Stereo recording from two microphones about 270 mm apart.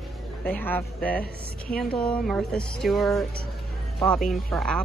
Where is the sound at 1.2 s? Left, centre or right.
Left.